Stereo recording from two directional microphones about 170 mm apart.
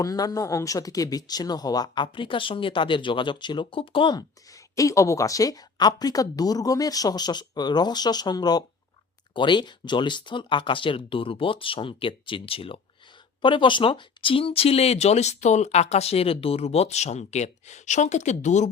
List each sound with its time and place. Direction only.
0.0 s speech: 20° left (ahead or behind); by 18.7 s 45° left (ahead or behind)